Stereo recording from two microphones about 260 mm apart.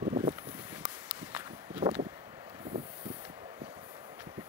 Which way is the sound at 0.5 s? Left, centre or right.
Centre.